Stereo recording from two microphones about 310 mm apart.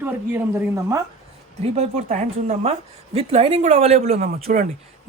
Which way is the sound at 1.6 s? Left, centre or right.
Right.